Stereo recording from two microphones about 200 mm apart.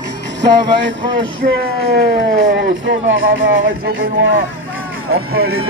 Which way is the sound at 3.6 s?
45° right (ahead or behind).